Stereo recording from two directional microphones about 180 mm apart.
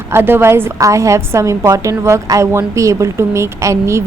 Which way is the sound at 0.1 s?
10° right (ahead or behind).